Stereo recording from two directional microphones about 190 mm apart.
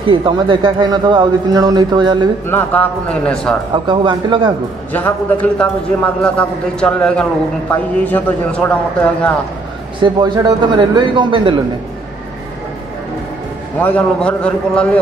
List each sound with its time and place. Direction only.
0.1 s speech: 25° right (ahead or behind)
2.4 s a man's voice: 10° left (ahead or behind)
3.7 s speech: 25° right (ahead or behind)
4.9 s a man's voice: 10° left (ahead or behind)
9.9 s speech: 25° right (ahead or behind)
13.7 s a man's voice: 10° left (ahead or behind)